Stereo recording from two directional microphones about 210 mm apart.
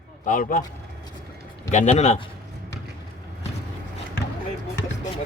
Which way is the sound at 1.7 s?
35° left (ahead or behind).